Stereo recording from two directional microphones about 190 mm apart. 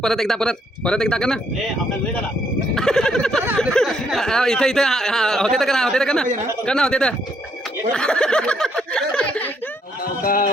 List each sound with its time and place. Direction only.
0.0 s speech: centre (ahead or behind)
2.7 s speech: 5° left (ahead or behind)
10.2 s music: 50° left (ahead or behind)